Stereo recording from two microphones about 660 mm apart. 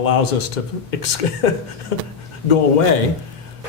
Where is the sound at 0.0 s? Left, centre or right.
Left.